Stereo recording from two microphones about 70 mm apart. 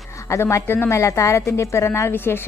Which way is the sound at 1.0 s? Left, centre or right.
Left.